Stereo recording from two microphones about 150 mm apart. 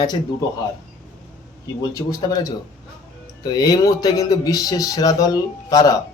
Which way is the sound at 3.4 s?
25° left (ahead or behind).